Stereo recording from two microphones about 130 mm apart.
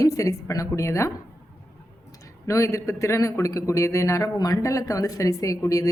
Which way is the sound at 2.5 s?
25° left (ahead or behind).